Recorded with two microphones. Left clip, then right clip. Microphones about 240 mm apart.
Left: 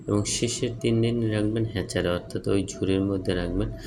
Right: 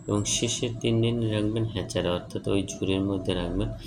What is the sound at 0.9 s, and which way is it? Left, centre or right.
Speech, centre.